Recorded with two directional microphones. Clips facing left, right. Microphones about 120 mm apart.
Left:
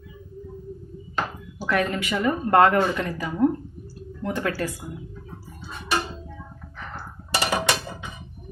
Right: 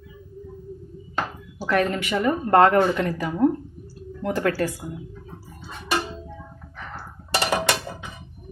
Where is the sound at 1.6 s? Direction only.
40° right (ahead or behind).